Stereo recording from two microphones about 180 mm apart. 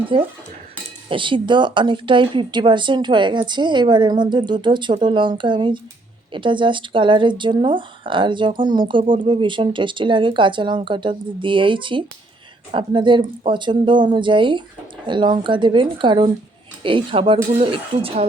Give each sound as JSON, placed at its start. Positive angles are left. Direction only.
{"t": 0.1, "sound": "speech", "side_deg": -30}